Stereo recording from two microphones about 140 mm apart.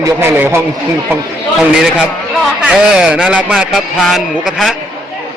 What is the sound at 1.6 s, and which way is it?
A man's voice, 5° right (ahead or behind).